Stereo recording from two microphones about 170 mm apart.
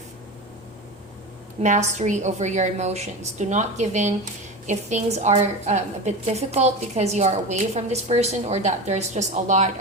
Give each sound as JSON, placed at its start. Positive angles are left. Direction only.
{"t": 1.6, "sound": "a woman's voice", "side_deg": -45}